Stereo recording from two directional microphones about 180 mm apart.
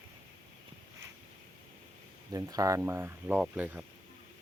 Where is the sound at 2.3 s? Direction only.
20° right (ahead or behind).